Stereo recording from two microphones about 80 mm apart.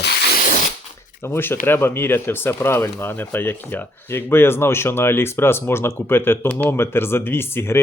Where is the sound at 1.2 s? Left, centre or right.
Left.